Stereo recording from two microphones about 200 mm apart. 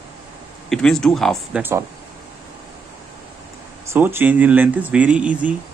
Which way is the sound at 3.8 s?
10° right (ahead or behind).